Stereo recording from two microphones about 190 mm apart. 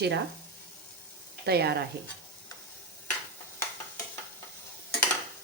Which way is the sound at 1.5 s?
60° right (ahead or behind).